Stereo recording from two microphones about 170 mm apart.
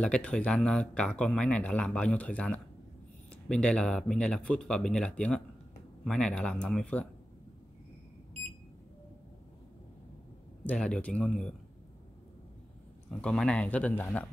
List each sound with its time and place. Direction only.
0.0 s speech: 5° left (ahead or behind)
10.6 s speech: 5° left (ahead or behind)
13.2 s speech: 5° left (ahead or behind)